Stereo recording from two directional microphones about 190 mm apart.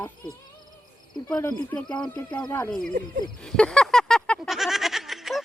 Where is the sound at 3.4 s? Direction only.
5° left (ahead or behind).